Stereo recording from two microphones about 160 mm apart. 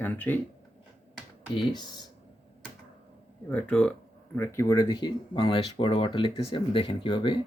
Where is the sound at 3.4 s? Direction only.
5° left (ahead or behind).